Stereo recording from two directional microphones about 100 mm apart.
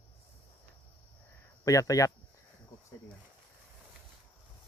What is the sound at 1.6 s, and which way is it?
Speech, 35° left (ahead or behind).